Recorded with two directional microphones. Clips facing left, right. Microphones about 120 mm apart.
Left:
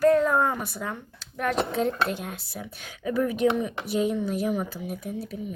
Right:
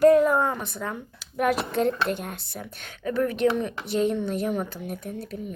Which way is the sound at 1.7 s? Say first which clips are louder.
Right 2 dB; centre (ahead or behind).